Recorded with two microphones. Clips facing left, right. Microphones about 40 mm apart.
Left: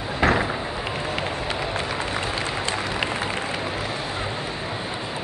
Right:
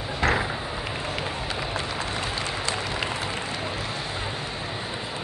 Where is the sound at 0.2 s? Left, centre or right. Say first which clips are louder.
Left 3 dB; left.